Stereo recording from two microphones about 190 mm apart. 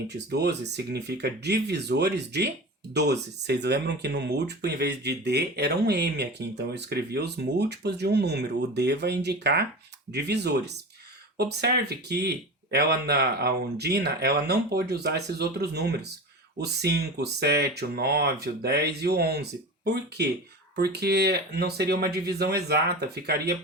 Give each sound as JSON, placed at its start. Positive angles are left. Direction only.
{"t": 0.1, "sound": "speech", "side_deg": -60}